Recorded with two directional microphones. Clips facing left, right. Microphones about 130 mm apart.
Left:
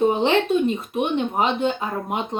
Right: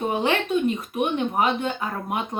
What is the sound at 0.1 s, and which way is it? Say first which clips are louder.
Speech: left 4 dB; 25° left (ahead or behind).